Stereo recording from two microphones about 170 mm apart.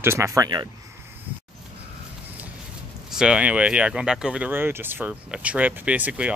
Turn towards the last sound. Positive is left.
turn(degrees=-10)  # may be behind; listen again after turning